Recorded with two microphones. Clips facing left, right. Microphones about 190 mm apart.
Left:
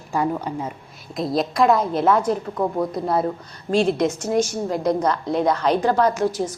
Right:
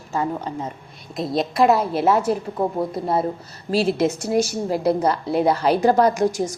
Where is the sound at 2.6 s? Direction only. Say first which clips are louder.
Even; 30° right (ahead or behind).